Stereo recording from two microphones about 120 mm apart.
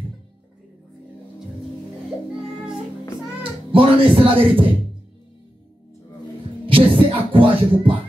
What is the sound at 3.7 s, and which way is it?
Speech, 45° right (ahead or behind).